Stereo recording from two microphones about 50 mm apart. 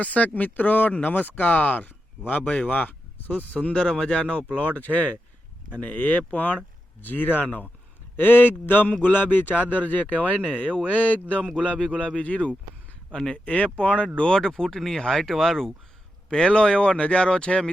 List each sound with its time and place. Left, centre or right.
0.0 s speech: left
2.4 s speech: left; by 15.7 s centre
16.3 s speech: centre